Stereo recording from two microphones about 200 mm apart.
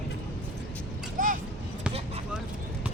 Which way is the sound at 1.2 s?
40° right (ahead or behind).